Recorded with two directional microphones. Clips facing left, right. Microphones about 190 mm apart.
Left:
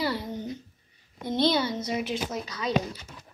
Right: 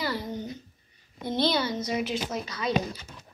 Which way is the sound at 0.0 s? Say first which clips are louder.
Left 2 dB; 25° left (ahead or behind).